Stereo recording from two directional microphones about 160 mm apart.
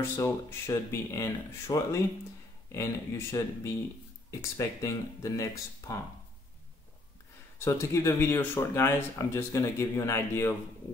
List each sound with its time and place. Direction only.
0.0 s speech: 15° left (ahead or behind)
7.5 s speech: 15° left (ahead or behind)